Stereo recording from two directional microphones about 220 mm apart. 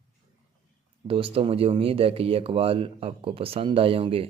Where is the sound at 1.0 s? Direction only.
25° right (ahead or behind).